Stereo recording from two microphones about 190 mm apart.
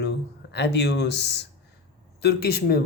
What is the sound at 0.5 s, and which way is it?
Speech, 60° left (ahead or behind).